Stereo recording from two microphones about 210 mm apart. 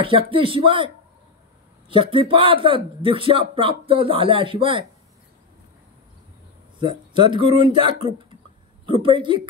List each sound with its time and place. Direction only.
0.3 s speech: 25° right (ahead or behind)
1.9 s speech: 25° right (ahead or behind)
6.8 s a woman's voice: 25° right (ahead or behind)